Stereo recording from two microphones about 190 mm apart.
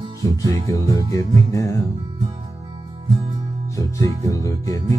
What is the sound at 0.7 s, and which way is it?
Music, 20° left (ahead or behind).